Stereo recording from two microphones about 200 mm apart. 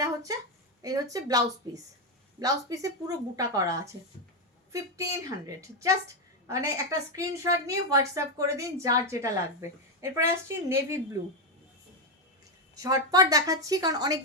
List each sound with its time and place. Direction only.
0.0 s a sound: 15° right (ahead or behind)
0.8 s a woman's voice: 15° right (ahead or behind)
5.5 s a woman's voice: 15° right (ahead or behind)
12.7 s a woman's voice: 20° right (ahead or behind)